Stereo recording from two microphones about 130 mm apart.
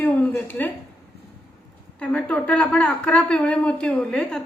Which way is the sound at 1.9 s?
10° left (ahead or behind).